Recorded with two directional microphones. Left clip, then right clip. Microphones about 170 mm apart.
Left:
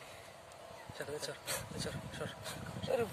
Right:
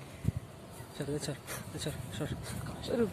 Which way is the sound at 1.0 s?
15° right (ahead or behind).